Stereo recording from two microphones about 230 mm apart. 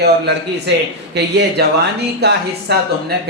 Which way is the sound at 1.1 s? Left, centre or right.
Right.